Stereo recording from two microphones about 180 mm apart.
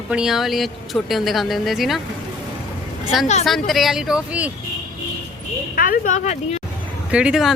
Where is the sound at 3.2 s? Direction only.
40° left (ahead or behind).